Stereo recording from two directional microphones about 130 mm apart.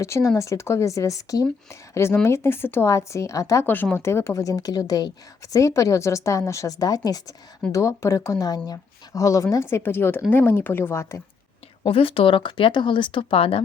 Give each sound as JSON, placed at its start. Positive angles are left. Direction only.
{"t": 0.0, "sound": "a woman's voice", "side_deg": 20}
{"t": 11.9, "sound": "speech", "side_deg": 45}